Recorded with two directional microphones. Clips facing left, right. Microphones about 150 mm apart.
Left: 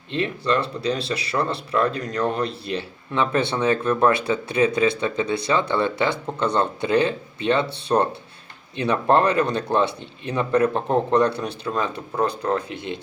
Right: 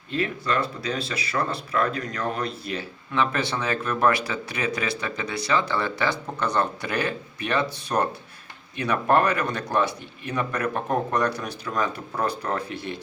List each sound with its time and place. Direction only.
0.1 s speech: 30° left (ahead or behind)